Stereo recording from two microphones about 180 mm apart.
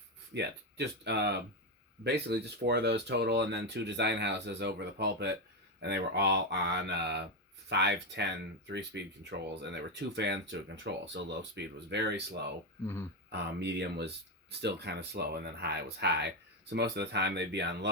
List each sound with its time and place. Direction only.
0.3 s speech: 70° right (ahead or behind)